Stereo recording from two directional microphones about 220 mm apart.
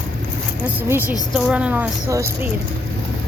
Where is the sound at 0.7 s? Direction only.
10° right (ahead or behind).